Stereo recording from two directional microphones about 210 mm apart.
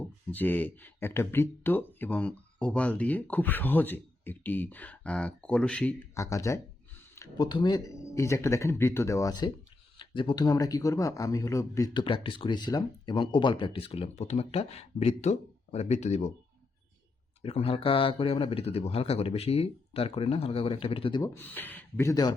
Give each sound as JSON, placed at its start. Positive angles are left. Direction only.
{"t": 0.3, "sound": "speech", "side_deg": 10}
{"t": 17.4, "sound": "speech", "side_deg": 25}
{"t": 21.3, "sound": "speech", "side_deg": 10}